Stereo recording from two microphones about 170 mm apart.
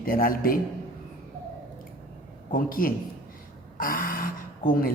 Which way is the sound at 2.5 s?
55° left (ahead or behind).